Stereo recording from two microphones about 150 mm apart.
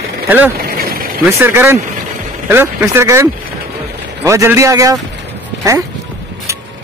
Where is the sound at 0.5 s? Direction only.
85° right.